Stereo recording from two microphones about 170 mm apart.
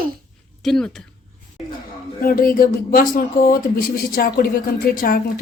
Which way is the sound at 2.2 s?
55° left (ahead or behind).